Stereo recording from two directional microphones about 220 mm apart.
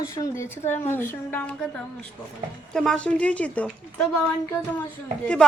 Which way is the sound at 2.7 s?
5° left (ahead or behind).